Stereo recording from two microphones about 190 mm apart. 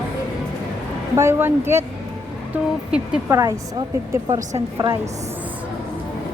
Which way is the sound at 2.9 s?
15° right (ahead or behind).